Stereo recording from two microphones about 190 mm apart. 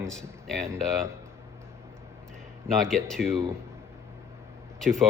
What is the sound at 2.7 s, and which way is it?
Speech, 5° left (ahead or behind).